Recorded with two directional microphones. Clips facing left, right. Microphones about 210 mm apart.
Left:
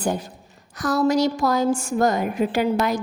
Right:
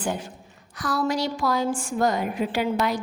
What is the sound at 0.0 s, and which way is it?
A woman's voice, 40° left (ahead or behind).